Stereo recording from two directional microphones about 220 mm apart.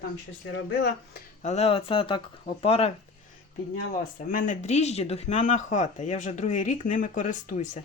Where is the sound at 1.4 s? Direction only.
30° left (ahead or behind).